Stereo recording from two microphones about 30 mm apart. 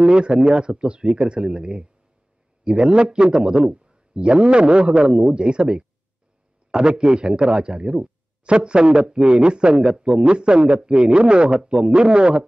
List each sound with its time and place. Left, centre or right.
0.0 s a man's voice: right